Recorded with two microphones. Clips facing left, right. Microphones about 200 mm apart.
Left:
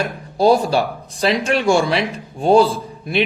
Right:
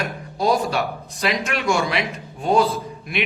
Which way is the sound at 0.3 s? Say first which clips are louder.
Left 6 dB; 30° left (ahead or behind).